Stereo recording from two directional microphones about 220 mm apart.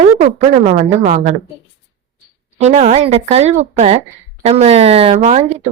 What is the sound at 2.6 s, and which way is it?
Speech, 30° right (ahead or behind).